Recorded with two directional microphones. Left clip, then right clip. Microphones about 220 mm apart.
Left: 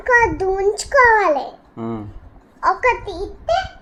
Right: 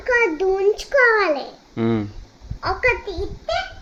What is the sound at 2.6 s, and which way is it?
Speech, 10° right (ahead or behind).